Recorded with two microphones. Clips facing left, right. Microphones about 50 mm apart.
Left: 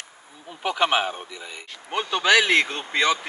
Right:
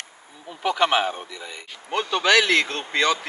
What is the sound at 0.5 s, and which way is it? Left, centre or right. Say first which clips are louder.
Speech: right 1 dB; centre.